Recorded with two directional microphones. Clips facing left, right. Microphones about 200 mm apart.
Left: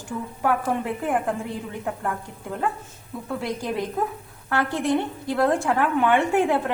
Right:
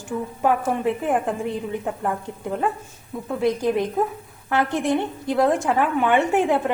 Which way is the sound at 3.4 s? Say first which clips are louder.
Right 8 dB; 20° right (ahead or behind).